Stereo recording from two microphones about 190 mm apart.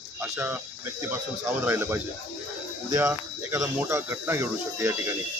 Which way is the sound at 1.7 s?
10° right (ahead or behind).